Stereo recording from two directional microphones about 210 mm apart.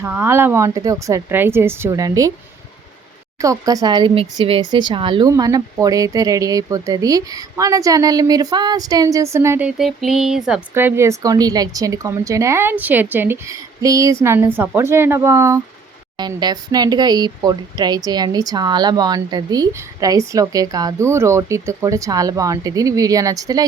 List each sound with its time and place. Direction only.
0.0 s speech: 10° right (ahead or behind)
3.4 s speech: 15° right (ahead or behind)